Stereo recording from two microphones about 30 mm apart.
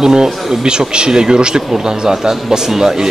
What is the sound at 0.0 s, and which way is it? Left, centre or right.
A man's voice, right.